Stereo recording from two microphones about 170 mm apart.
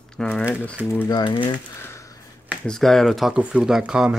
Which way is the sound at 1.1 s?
30° left (ahead or behind).